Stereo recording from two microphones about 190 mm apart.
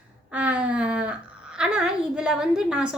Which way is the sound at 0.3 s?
5° right (ahead or behind).